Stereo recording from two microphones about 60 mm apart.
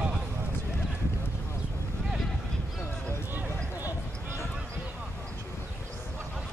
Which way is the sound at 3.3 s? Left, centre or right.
Right.